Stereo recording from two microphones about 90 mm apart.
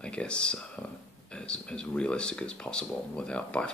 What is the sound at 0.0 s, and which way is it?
Speech, 10° left (ahead or behind).